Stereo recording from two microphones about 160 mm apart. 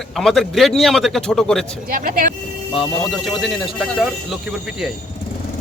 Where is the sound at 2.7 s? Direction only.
Centre (ahead or behind).